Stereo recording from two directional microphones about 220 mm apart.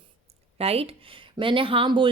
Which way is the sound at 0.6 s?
25° right (ahead or behind).